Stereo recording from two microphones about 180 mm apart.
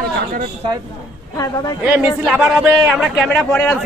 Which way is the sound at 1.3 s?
20° left (ahead or behind).